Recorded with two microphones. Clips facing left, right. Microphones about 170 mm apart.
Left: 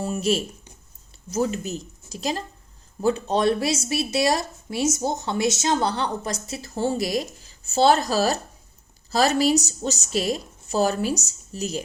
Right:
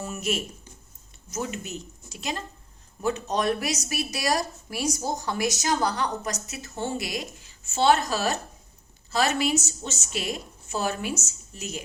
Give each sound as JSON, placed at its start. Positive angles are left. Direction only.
{"t": 0.0, "sound": "a woman's voice", "side_deg": 30}